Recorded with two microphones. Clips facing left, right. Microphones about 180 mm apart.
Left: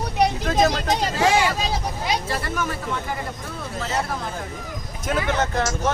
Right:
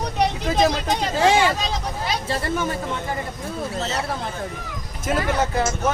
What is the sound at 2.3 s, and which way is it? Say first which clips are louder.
Speech: right 2 dB; 25° right (ahead or behind).